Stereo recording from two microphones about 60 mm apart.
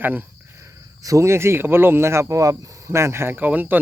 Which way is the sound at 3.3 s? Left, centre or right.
Right.